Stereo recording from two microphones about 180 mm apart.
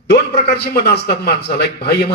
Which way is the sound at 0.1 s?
65° left (ahead or behind).